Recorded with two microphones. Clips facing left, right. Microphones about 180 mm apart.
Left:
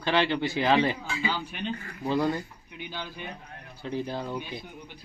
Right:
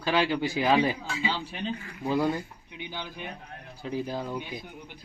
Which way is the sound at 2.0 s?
15° right (ahead or behind).